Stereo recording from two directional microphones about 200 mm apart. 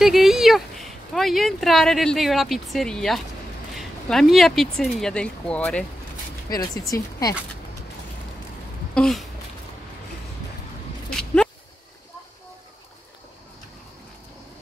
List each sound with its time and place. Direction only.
0.0 s speech: centre (ahead or behind)
6.5 s speech: 20° left (ahead or behind)
8.9 s speech: 5° left (ahead or behind)
11.1 s a sound: 5° left (ahead or behind)